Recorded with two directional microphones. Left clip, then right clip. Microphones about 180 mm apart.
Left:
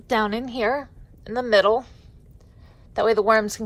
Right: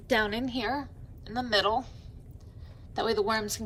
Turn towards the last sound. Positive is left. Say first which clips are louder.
# left 10 dB
turn(degrees=25)  # may be behind; listen again after turning